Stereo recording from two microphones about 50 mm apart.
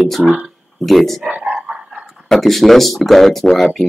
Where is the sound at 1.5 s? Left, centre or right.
Centre.